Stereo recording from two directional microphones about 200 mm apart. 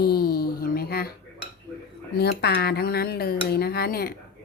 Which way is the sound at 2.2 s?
55° left (ahead or behind).